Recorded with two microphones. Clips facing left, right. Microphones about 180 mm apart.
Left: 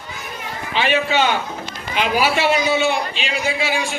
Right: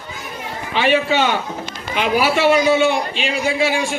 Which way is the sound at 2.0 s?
50° right (ahead or behind).